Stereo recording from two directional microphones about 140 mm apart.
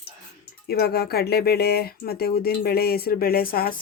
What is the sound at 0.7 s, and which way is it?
Speech, 90° left.